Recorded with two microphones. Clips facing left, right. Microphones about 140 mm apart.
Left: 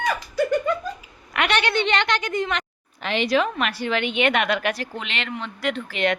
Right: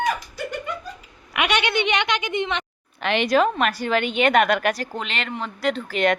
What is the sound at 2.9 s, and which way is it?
A woman's voice, 60° right (ahead or behind).